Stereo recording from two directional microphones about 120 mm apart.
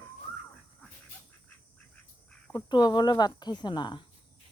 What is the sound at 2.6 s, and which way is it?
Speech, 40° left (ahead or behind).